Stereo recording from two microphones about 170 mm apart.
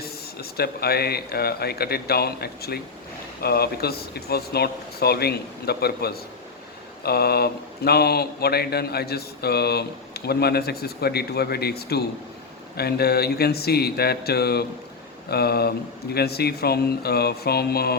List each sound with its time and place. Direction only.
0.0 s speech: 65° left (ahead or behind)